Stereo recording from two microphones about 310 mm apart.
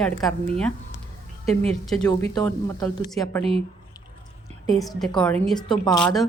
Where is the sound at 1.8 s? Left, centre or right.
Centre.